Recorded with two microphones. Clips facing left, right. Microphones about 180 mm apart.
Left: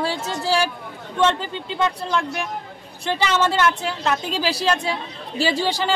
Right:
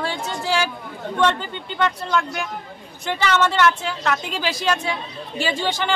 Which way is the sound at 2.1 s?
30° left (ahead or behind).